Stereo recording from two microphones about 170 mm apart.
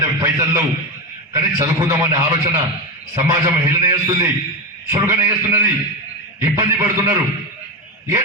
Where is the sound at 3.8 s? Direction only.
20° right (ahead or behind).